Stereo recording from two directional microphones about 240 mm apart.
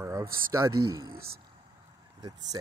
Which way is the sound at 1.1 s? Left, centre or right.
Right.